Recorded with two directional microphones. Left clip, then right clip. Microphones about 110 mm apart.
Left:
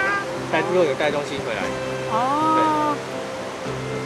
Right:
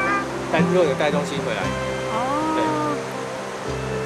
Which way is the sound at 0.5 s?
15° right (ahead or behind).